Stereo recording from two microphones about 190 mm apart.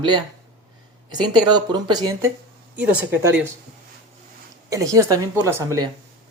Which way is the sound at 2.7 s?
5° right (ahead or behind).